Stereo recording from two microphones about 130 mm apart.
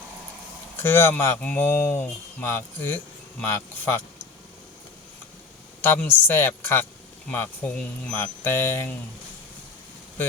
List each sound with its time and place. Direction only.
0.8 s speech: 15° left (ahead or behind)
5.8 s speech: 15° left (ahead or behind)